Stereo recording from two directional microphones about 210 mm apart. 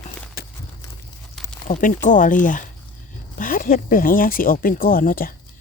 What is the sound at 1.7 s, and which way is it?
Speech, 40° left (ahead or behind).